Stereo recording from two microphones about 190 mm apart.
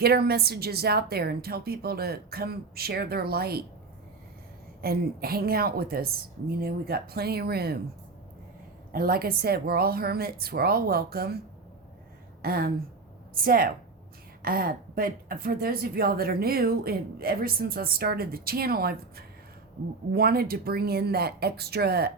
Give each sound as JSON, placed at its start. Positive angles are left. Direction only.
{"t": 0.0, "sound": "a woman's voice", "side_deg": -55}
{"t": 4.8, "sound": "a woman's voice", "side_deg": -50}
{"t": 8.9, "sound": "speech", "side_deg": -50}
{"t": 12.4, "sound": "a woman's voice", "side_deg": -50}